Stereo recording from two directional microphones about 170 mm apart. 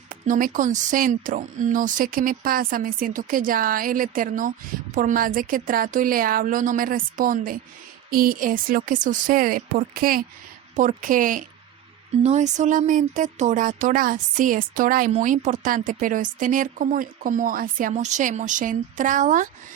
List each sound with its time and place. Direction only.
0.1 s a woman's voice: 55° right (ahead or behind)